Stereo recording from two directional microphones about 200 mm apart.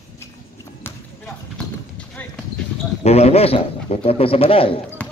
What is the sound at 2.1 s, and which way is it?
Clip-clop, 5° left (ahead or behind).